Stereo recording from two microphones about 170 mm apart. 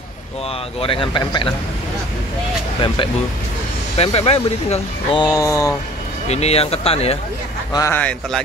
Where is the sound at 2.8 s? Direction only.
30° left (ahead or behind).